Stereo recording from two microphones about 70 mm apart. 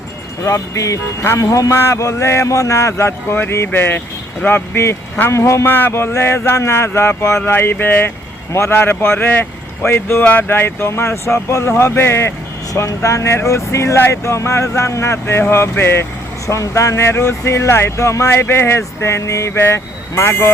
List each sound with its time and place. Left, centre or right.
0.4 s speech: left
12.7 s speech: left
16.5 s speech: left